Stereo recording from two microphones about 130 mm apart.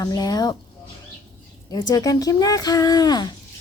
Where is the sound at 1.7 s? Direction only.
30° left (ahead or behind).